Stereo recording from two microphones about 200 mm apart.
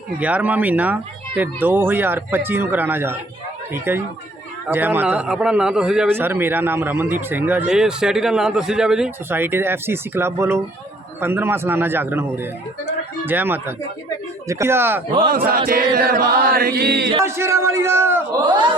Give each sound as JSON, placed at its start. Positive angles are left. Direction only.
{"t": 0.2, "sound": "a man's voice", "side_deg": -5}
{"t": 15.3, "sound": "chant", "side_deg": -45}
{"t": 17.2, "sound": "a man's voice", "side_deg": -15}